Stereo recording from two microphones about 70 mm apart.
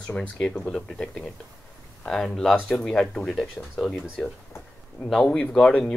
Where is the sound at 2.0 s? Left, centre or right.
Centre.